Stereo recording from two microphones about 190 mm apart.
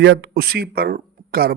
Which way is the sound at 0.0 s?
60° right (ahead or behind).